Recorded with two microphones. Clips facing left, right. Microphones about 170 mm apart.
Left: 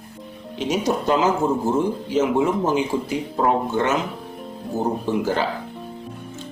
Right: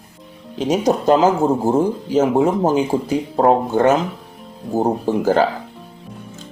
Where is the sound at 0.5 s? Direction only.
40° right (ahead or behind).